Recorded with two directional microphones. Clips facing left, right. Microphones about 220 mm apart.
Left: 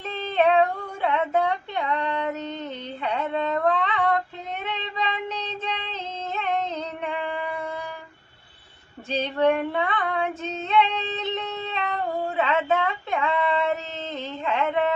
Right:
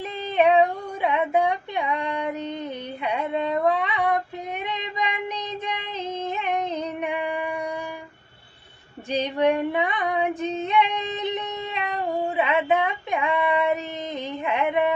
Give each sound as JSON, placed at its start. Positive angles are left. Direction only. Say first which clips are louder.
{"t": 0.0, "sound": "female singing", "louder": "right 1 dB", "side_deg": -15}
{"t": 4.6, "sound": "child singing", "louder": "left 1 dB", "side_deg": -15}
{"t": 9.0, "sound": "female singing", "louder": "even", "side_deg": -15}